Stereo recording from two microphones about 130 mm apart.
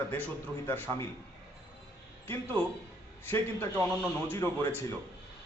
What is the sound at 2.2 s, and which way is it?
A man's voice, 15° left (ahead or behind).